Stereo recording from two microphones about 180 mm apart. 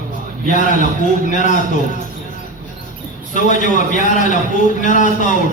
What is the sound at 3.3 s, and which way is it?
A man's voice, 45° left (ahead or behind).